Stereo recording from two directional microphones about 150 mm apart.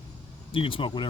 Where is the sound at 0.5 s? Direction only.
35° left (ahead or behind).